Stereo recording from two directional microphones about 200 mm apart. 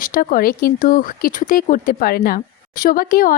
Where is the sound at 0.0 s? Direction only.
45° left (ahead or behind).